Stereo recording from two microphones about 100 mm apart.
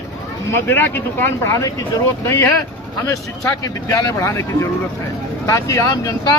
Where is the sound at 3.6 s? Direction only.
35° left (ahead or behind).